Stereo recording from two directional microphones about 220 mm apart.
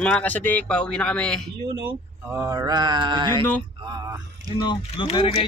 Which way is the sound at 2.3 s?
10° right (ahead or behind).